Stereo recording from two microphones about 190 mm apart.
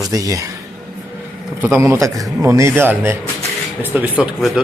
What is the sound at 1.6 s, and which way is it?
Speech, 10° right (ahead or behind).